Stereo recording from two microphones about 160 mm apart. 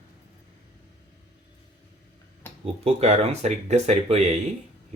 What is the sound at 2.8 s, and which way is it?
Speech, 40° right (ahead or behind).